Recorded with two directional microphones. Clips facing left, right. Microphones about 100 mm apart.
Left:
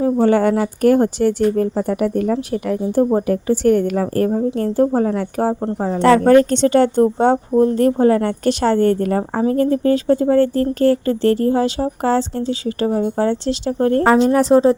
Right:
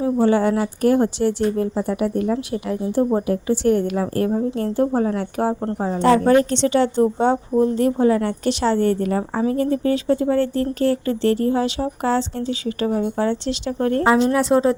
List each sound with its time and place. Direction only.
0.0 s a woman's voice: 50° left (ahead or behind)
6.0 s a woman's voice: 60° left (ahead or behind); by 14.3 s 40° left (ahead or behind)
14.3 s speech: 30° left (ahead or behind)